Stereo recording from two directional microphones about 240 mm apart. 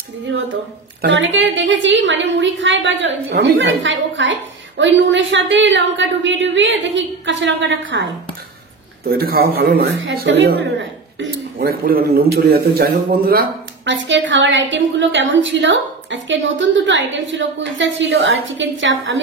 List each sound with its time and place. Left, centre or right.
1.0 s a woman's voice: right
9.0 s speech: right
10.0 s a woman's voice: right